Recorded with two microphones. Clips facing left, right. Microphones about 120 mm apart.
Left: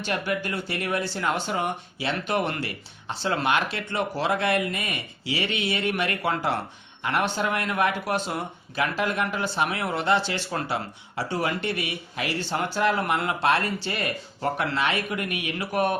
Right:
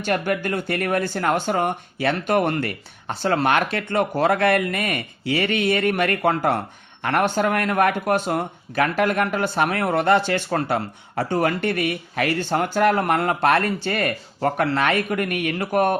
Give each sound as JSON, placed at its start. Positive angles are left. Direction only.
{"t": 0.0, "sound": "speech", "side_deg": -50}